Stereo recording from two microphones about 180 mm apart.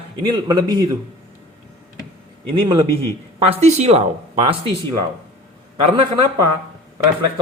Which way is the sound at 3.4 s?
40° right (ahead or behind).